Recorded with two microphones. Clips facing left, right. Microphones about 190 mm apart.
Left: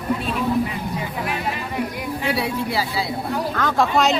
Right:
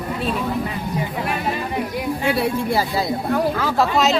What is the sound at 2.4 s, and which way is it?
Speech, 50° right (ahead or behind).